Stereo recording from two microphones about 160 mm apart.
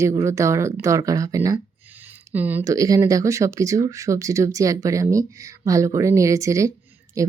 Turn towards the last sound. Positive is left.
turn(degrees=-20)  # may be behind; listen again after turning